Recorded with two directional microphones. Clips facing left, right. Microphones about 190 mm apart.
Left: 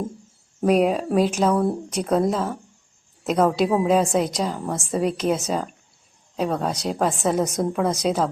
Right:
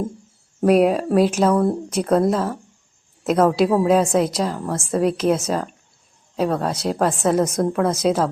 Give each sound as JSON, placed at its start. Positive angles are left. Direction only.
{"t": 0.6, "sound": "a woman's voice", "side_deg": -5}